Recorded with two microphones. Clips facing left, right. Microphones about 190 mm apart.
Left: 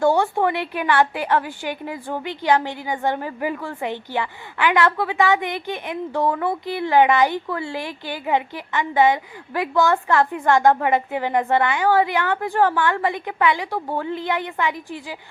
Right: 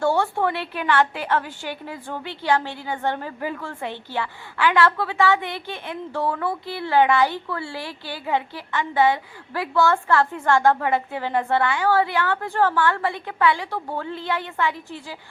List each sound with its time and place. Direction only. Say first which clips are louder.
0.0 s a woman's voice: left 3 dB; 15° left (ahead or behind)